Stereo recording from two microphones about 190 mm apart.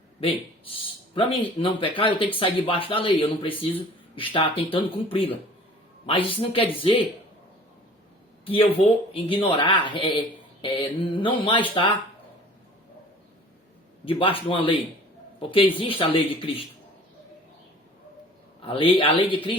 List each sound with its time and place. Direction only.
0.2 s speech: 30° left (ahead or behind)
8.4 s speech: 30° left (ahead or behind)
14.0 s speech: 30° left (ahead or behind)
18.6 s speech: 25° left (ahead or behind)